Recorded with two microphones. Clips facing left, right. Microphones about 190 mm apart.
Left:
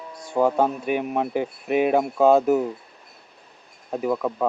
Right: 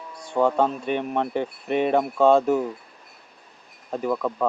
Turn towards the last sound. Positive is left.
turn(degrees=10)  # may be behind; listen again after turning